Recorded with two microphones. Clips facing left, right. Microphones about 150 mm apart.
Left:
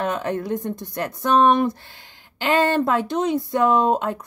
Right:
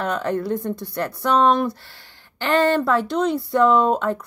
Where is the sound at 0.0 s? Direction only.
20° left (ahead or behind).